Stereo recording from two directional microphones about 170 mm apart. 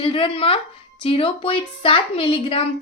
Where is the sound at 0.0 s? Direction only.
30° left (ahead or behind).